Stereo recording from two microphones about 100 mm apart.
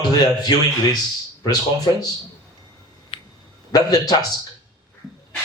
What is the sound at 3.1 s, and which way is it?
Dog, 55° left (ahead or behind).